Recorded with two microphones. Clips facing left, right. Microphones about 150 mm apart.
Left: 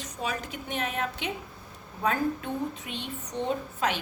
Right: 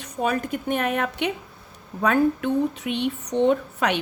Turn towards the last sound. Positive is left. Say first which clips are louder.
# right 8 dB
turn(degrees=-65)  # may be behind; listen again after turning